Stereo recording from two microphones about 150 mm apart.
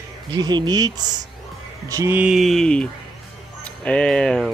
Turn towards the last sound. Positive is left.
turn(degrees=5)  # may be behind; listen again after turning